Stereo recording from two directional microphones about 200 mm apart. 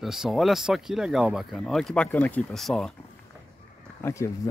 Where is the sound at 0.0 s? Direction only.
Centre (ahead or behind).